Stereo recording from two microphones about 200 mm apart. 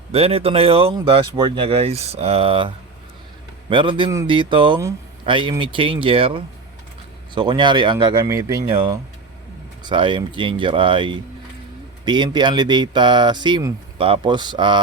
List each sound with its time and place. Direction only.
0.1 s speech: 30° right (ahead or behind)